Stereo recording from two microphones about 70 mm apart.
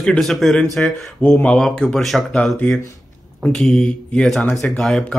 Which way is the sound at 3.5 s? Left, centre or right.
Centre.